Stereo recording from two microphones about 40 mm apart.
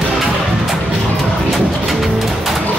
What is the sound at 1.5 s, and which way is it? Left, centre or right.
Bird, centre.